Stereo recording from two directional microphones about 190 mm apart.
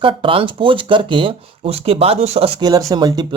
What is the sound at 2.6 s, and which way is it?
Speech, 20° right (ahead or behind).